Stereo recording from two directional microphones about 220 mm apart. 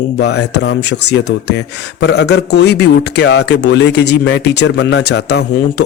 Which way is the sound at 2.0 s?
50° left (ahead or behind).